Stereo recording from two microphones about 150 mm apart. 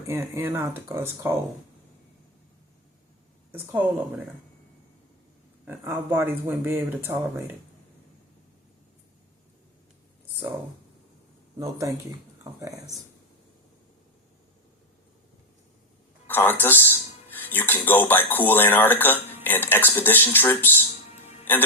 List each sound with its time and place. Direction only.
0.1 s speech: 15° right (ahead or behind)
3.5 s speech: 15° right (ahead or behind)
5.6 s speech: 15° right (ahead or behind)
12.5 s speech: 20° right (ahead or behind)
16.2 s speech: 15° left (ahead or behind)